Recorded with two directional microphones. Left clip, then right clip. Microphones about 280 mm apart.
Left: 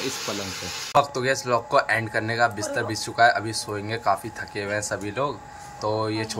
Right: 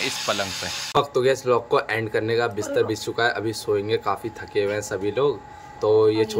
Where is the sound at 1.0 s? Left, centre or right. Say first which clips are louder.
Right 1 dB; centre.